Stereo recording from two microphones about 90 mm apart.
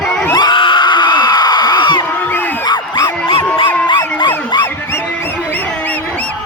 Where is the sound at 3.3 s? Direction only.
75° left (ahead or behind).